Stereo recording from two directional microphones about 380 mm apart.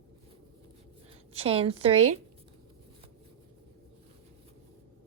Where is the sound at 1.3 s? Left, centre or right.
Centre.